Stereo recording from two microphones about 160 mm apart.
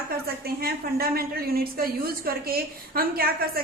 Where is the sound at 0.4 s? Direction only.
70° right (ahead or behind).